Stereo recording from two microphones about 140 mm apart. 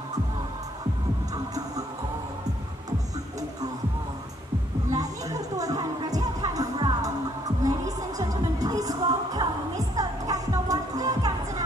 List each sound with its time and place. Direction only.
1.3 s music: 25° right (ahead or behind)
4.9 s music: 25° right (ahead or behind)